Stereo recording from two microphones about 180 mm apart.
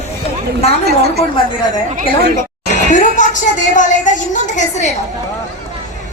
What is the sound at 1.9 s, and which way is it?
Speech, 60° right (ahead or behind).